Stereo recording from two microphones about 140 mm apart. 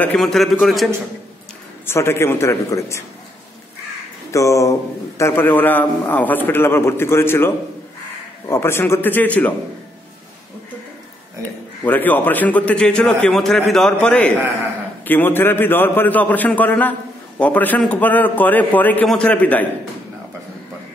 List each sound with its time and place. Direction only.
0.0 s a man's voice: 5° left (ahead or behind)
1.9 s a man's voice: 20° left (ahead or behind)
4.3 s a man's voice: 20° left (ahead or behind)
11.8 s a man's voice: 10° left (ahead or behind)